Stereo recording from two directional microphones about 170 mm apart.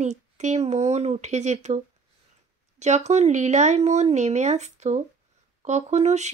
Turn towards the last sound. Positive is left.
turn(degrees=-40)  # may be behind; listen again after turning